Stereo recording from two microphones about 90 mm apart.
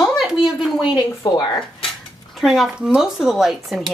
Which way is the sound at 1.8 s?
Centre (ahead or behind).